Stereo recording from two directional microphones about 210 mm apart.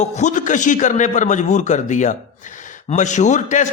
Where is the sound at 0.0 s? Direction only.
35° left (ahead or behind).